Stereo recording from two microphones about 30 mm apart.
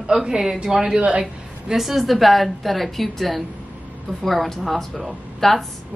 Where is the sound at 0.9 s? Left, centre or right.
Right.